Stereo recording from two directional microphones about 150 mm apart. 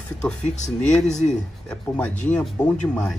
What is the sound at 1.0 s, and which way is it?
Speech, 50° left (ahead or behind).